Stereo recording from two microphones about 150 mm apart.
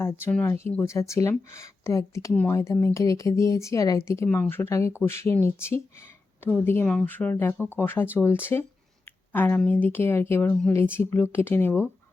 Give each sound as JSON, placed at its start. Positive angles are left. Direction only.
{"t": 0.0, "sound": "speech", "side_deg": 15}